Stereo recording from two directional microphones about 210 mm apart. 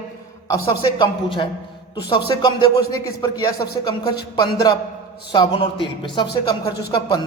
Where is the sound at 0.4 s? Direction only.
20° left (ahead or behind).